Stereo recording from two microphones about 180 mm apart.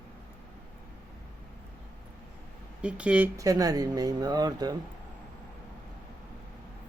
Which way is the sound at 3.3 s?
20° right (ahead or behind).